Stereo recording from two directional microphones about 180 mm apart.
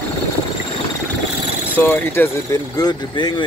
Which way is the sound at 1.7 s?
10° left (ahead or behind).